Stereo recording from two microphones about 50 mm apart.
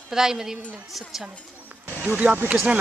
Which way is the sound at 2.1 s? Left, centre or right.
Right.